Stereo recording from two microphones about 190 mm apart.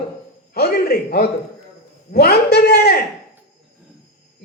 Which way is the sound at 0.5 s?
55° left (ahead or behind).